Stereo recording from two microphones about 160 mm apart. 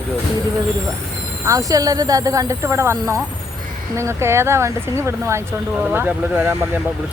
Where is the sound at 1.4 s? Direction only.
20° right (ahead or behind).